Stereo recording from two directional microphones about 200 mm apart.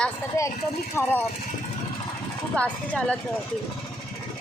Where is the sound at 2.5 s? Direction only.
5° left (ahead or behind).